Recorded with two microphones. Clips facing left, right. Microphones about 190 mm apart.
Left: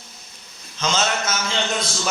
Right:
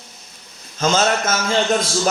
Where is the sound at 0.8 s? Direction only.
50° right (ahead or behind).